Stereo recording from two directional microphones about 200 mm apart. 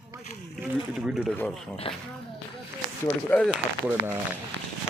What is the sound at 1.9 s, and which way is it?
Speech, 25° left (ahead or behind).